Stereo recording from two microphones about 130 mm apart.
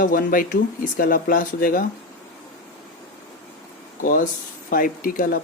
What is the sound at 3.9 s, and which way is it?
Speech, 90° left.